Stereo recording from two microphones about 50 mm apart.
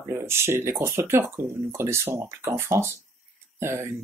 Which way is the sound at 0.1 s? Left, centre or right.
Right.